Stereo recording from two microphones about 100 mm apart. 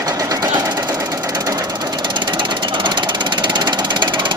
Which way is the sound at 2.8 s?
50° right (ahead or behind).